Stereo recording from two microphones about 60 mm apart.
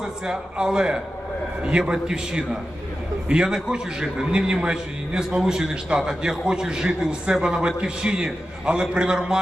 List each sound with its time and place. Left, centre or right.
0.0 s a man's voice: centre